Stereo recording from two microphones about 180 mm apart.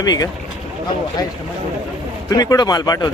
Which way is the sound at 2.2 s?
20° left (ahead or behind).